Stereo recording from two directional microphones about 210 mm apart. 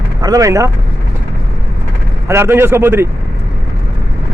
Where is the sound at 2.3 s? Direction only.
10° right (ahead or behind).